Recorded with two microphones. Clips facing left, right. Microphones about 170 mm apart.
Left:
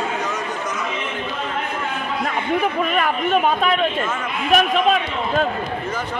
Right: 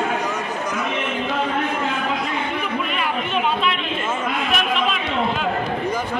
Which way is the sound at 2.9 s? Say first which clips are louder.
Left 4 dB; 45° left (ahead or behind).